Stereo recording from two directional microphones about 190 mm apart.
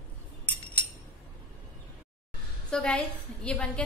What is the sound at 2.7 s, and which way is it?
A woman's voice, 5° left (ahead or behind).